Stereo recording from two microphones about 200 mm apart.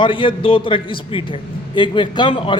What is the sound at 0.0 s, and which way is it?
A man's voice, 25° left (ahead or behind).